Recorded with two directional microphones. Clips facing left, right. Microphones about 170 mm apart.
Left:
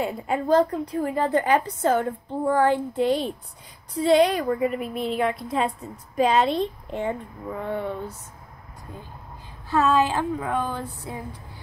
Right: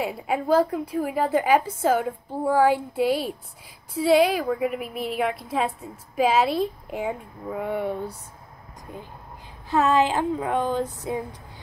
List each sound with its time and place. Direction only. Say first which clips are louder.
0.0 s a woman's voice: left 1 dB; 5° right (ahead or behind)
9.7 s a woman's voice: even; 15° right (ahead or behind)